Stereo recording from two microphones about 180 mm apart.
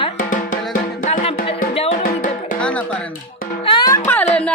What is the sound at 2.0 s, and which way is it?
Music, 50° left (ahead or behind).